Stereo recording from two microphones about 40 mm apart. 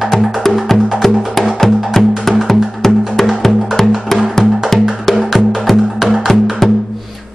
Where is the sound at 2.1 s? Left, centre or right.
Centre.